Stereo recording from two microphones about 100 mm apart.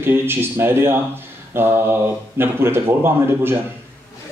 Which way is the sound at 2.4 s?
25° right (ahead or behind).